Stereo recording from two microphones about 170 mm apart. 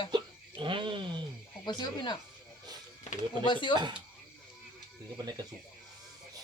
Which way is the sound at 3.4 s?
25° left (ahead or behind).